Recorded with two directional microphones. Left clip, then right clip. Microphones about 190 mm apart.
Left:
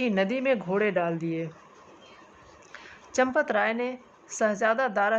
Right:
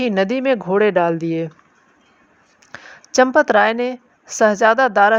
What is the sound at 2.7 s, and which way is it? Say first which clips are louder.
Speech: right 11 dB; 35° right (ahead or behind).